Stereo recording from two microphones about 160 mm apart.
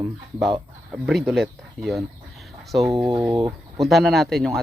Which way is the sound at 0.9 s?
Centre (ahead or behind).